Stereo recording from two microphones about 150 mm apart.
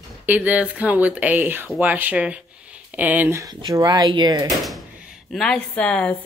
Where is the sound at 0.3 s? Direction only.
10° right (ahead or behind); by 4.5 s 30° right (ahead or behind).